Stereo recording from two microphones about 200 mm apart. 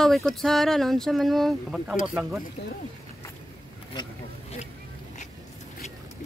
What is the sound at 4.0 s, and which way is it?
Speech, 20° left (ahead or behind).